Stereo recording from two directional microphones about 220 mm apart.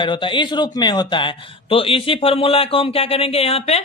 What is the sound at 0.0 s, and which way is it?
A man's voice, 20° left (ahead or behind).